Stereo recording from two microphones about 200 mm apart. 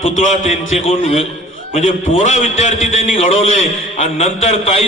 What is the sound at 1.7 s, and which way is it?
A man's voice, 35° left (ahead or behind).